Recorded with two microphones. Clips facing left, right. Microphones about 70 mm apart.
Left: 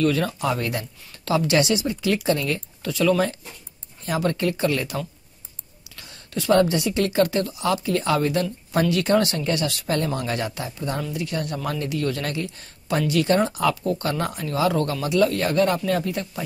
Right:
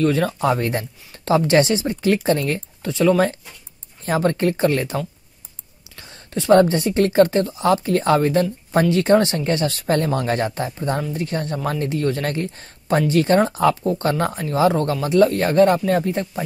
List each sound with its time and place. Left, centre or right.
0.0 s speech: right